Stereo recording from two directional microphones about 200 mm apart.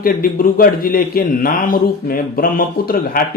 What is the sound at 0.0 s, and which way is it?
A man's voice, 45° left (ahead or behind).